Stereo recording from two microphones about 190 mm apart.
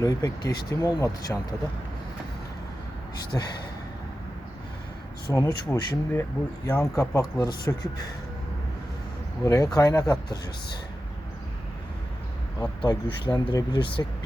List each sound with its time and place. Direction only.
0.0 s speech: 20° left (ahead or behind)
3.3 s speech: 15° left (ahead or behind)
5.3 s speech: 15° left (ahead or behind)
9.4 s speech: 20° left (ahead or behind)
12.8 s speech: 25° left (ahead or behind)